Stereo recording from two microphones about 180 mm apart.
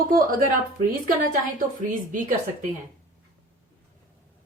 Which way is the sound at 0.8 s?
50° right (ahead or behind).